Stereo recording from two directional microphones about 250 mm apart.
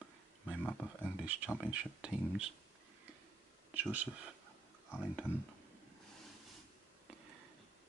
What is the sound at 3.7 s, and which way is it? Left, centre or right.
Speech, centre.